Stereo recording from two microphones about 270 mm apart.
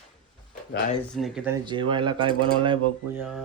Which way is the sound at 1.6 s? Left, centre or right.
Centre.